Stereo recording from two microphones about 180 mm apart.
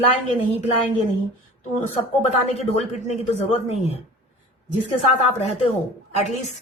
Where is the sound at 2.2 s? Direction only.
35° left (ahead or behind).